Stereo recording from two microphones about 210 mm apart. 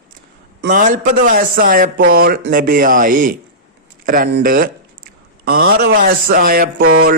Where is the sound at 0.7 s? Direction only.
40° right (ahead or behind).